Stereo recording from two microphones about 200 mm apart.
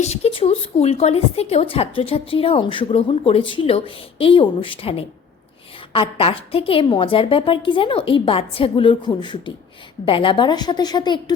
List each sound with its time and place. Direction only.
0.0 s a woman's voice: 30° left (ahead or behind)